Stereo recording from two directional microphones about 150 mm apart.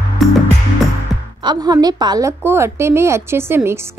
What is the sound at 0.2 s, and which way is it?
Music, centre (ahead or behind).